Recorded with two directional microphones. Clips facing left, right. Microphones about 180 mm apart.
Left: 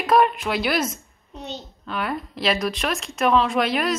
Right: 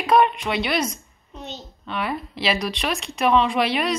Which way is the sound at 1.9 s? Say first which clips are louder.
Even; centre (ahead or behind).